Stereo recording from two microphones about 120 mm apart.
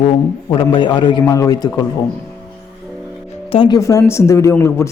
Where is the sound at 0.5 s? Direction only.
45° left (ahead or behind).